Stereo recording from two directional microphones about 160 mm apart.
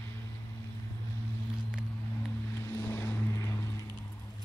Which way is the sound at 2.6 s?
15° left (ahead or behind).